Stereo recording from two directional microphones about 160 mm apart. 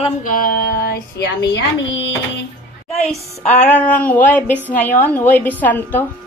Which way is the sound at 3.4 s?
10° left (ahead or behind).